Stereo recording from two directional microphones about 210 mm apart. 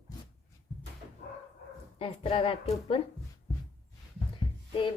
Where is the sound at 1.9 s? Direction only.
25° left (ahead or behind).